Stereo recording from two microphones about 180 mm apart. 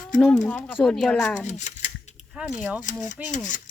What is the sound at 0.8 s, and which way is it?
Speech, centre (ahead or behind).